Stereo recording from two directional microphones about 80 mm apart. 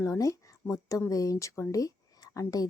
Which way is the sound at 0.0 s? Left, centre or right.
Left.